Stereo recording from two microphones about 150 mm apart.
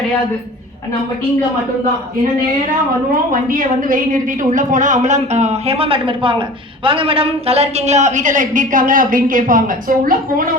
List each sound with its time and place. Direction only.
3.5 s a woman's voice: 65° right (ahead or behind)